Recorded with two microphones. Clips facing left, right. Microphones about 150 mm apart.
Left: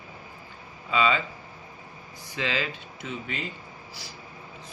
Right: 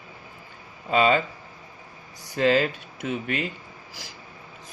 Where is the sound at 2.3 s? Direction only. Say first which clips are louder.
Right 9 dB; 50° right (ahead or behind).